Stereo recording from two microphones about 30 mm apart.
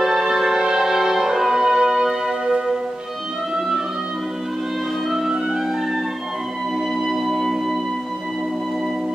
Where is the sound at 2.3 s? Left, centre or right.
Right.